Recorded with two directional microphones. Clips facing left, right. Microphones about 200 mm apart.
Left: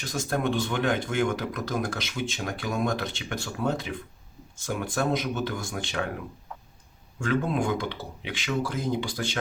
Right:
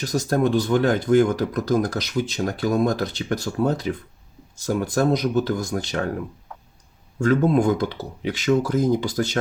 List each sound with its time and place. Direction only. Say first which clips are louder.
0.0 s speech: right 7 dB; 40° right (ahead or behind)
7.2 s speech: right 8 dB; 40° right (ahead or behind)